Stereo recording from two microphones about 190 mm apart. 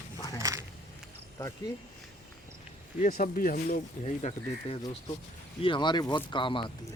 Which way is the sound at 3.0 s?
45° left (ahead or behind).